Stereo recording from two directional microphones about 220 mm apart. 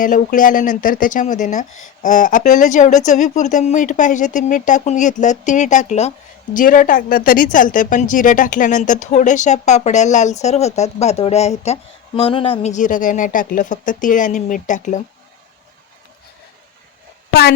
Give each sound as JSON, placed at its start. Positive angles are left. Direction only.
{"t": 0.0, "sound": "speech", "side_deg": 35}